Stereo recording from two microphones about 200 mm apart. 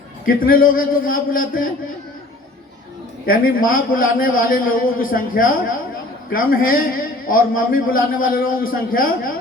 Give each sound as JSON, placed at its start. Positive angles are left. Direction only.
{"t": 0.3, "sound": "a man's voice", "side_deg": 45}
{"t": 3.2, "sound": "a man's voice", "side_deg": 45}